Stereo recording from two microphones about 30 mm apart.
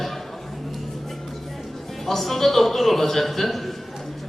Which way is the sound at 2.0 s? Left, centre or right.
Centre.